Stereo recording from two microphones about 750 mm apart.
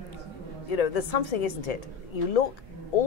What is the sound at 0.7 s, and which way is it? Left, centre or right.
A man's voice, left.